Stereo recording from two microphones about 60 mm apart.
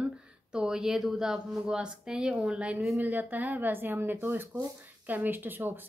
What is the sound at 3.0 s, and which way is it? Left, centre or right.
Speech, right.